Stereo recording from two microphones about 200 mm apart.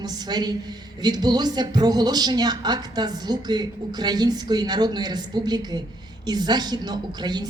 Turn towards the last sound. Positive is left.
turn(degrees=-20)  # may be behind; listen again after turning